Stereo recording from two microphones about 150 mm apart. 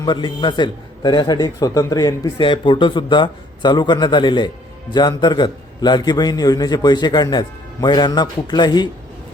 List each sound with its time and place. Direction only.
0.0 s a man's voice: 30° left (ahead or behind)